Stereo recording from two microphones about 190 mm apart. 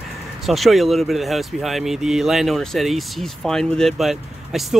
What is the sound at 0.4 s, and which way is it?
Speech, centre (ahead or behind).